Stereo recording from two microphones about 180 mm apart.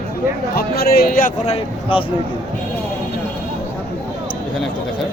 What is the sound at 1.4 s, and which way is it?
Speech, 30° left (ahead or behind).